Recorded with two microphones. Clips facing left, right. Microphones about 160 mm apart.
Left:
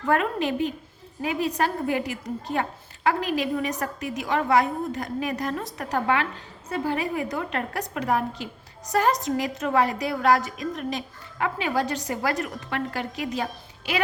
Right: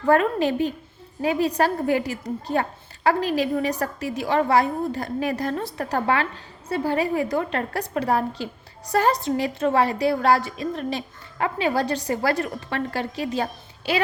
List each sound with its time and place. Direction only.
0.1 s a woman's voice: 35° right (ahead or behind)